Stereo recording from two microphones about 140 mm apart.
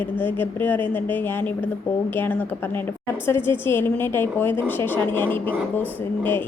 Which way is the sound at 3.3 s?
15° left (ahead or behind).